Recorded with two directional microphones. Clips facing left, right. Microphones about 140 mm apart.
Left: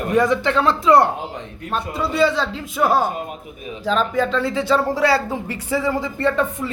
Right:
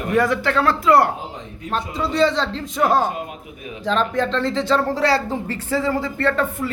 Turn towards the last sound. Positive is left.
turn(degrees=15)  # may be behind; listen again after turning